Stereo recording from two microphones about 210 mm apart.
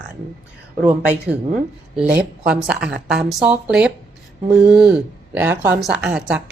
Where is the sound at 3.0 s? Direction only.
Centre (ahead or behind).